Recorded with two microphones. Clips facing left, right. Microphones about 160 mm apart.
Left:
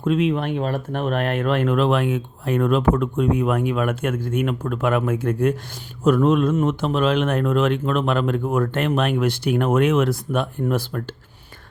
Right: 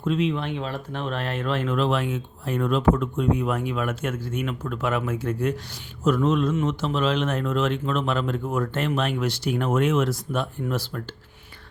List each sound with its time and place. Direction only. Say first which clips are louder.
0.0 s speech: left 4 dB; 55° left (ahead or behind)